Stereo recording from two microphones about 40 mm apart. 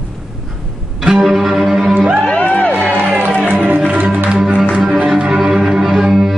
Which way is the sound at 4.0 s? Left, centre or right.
Right.